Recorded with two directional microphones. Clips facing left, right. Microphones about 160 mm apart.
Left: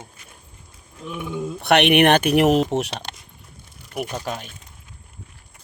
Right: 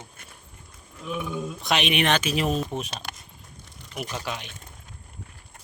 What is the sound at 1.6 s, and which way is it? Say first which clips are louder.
Speech: left 10 dB; 65° left (ahead or behind).